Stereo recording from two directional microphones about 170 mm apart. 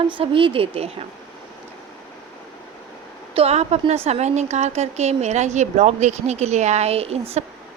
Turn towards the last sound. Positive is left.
turn(degrees=-35)  # may be behind; listen again after turning